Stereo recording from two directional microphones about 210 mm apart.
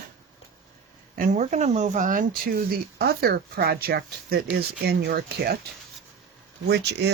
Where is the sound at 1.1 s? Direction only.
40° right (ahead or behind).